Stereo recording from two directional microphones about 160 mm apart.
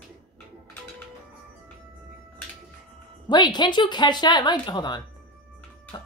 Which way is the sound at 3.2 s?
30° left (ahead or behind).